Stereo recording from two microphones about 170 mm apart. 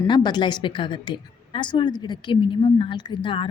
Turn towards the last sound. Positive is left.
turn(degrees=30)  # may be behind; listen again after turning